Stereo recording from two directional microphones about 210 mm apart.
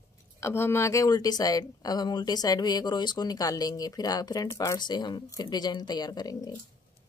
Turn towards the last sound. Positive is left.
turn(degrees=20)  # may be behind; listen again after turning